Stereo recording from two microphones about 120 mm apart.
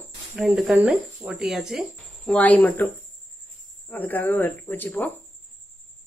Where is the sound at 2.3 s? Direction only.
15° left (ahead or behind).